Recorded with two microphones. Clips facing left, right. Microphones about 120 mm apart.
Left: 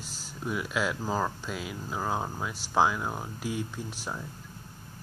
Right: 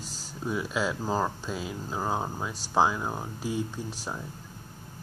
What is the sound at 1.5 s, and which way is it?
Speech, 25° right (ahead or behind).